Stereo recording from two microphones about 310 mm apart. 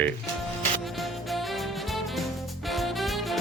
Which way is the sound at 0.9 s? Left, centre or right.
Centre.